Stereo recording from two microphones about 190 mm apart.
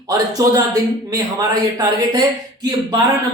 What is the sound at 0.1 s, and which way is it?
Speech, 20° right (ahead or behind).